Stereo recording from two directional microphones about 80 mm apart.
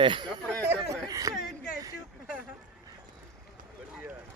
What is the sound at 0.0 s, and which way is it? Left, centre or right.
Speech, right.